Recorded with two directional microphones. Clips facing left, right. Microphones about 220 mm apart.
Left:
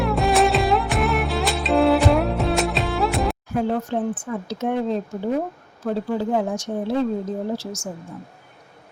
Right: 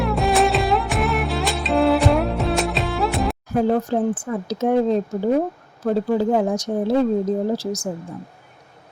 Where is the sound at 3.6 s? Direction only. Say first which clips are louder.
Right 5 dB; 40° right (ahead or behind).